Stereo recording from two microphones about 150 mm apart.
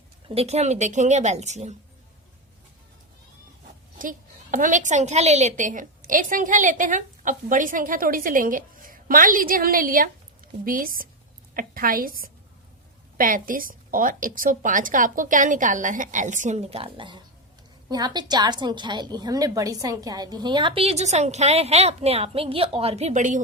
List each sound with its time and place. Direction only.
0.3 s a woman's voice: 45° right (ahead or behind)
4.5 s a woman's voice: 60° right (ahead or behind)